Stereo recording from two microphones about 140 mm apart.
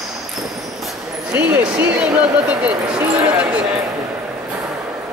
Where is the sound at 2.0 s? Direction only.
10° right (ahead or behind).